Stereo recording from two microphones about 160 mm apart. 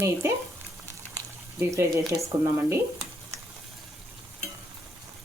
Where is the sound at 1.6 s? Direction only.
20° right (ahead or behind).